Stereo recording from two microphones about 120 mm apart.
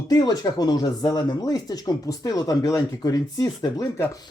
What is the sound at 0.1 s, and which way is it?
Speech, 35° left (ahead or behind).